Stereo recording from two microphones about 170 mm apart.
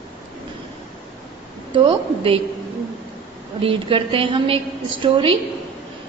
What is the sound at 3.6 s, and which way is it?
A woman's voice, 35° right (ahead or behind).